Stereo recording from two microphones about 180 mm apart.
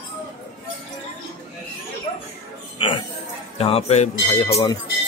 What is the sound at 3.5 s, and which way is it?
Music, 35° left (ahead or behind).